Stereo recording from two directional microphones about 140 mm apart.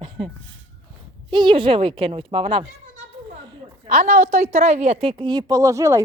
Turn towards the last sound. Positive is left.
turn(degrees=-20)  # may be behind; listen again after turning